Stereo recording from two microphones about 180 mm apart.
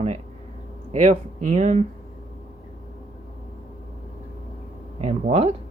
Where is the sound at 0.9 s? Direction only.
35° right (ahead or behind).